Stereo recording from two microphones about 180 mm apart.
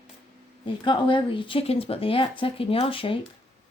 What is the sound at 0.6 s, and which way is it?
Speech, 25° left (ahead or behind).